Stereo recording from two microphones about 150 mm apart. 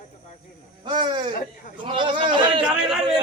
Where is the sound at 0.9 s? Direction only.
30° right (ahead or behind).